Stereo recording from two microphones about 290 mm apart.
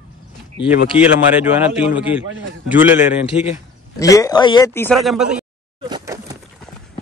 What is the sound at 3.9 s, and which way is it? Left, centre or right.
A man's voice, centre.